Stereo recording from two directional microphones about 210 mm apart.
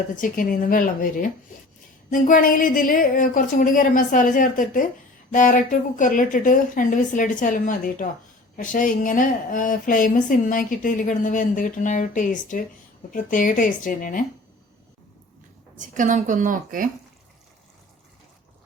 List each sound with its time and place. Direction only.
0.2 s a woman's voice: 40° left (ahead or behind)
15.8 s a woman's voice: 35° right (ahead or behind)